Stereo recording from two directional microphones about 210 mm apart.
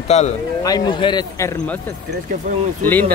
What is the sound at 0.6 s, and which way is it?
A man's voice, 20° left (ahead or behind).